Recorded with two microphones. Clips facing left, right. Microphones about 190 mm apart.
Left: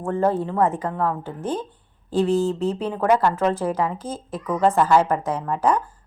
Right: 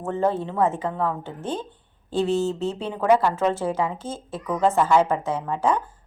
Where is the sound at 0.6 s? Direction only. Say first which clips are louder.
Left 1 dB; 35° left (ahead or behind).